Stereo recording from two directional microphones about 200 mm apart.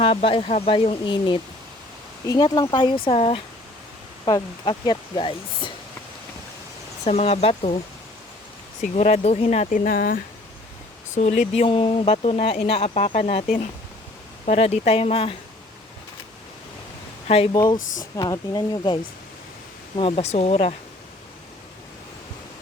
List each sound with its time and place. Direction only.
0.0 s speech: 25° left (ahead or behind)
7.0 s speech: 30° left (ahead or behind)
8.8 s speech: 30° left (ahead or behind)
11.1 s speech: 35° left (ahead or behind)
17.2 s speech: 30° left (ahead or behind)
17.5 s speech: 20° left (ahead or behind)
20.0 s speech: 30° left (ahead or behind)